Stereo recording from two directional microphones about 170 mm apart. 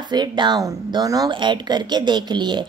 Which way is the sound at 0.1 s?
25° right (ahead or behind).